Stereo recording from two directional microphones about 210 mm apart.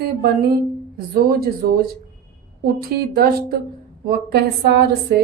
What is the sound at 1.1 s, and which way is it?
Speech, 45° right (ahead or behind).